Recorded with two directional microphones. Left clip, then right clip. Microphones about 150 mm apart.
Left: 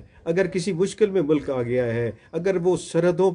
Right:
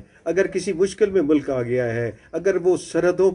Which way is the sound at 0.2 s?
35° left (ahead or behind).